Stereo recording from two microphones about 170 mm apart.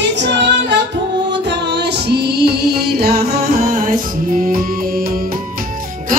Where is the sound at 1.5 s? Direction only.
80° right.